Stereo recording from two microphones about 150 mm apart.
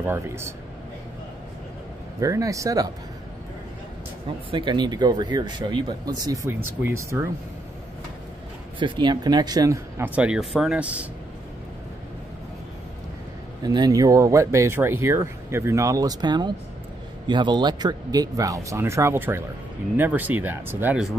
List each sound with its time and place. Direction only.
0.0 s speech: 15° right (ahead or behind)
2.1 s speech: 20° right (ahead or behind)
4.5 s speech: 30° right (ahead or behind)
8.7 s speech: 30° right (ahead or behind); by 11.1 s 10° right (ahead or behind)
13.6 s speech: 25° right (ahead or behind); by 21.1 s 10° right (ahead or behind)